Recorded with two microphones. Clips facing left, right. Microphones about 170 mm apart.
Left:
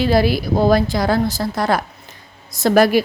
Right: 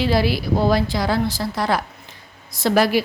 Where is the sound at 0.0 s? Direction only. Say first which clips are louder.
Left 3 dB; 50° left (ahead or behind).